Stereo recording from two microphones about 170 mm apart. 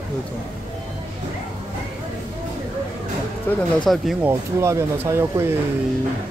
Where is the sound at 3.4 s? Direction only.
5° left (ahead or behind).